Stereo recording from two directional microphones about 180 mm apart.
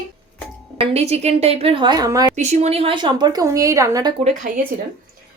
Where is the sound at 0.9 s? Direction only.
35° right (ahead or behind); by 2.3 s 20° right (ahead or behind).